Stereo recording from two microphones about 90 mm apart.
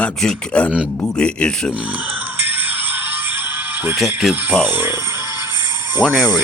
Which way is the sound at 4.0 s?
Centre (ahead or behind).